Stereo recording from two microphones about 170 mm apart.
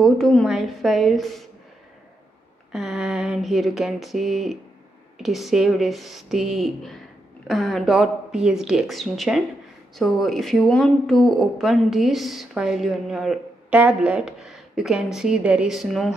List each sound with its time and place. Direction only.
0.0 s speech: 5° left (ahead or behind)
2.7 s speech: 5° right (ahead or behind)